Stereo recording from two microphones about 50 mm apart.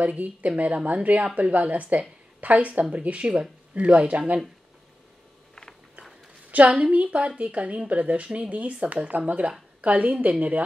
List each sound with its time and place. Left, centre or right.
0.0 s a woman's voice: right
6.5 s a woman's voice: right